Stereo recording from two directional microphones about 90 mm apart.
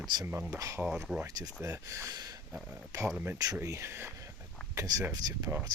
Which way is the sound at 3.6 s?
30° right (ahead or behind).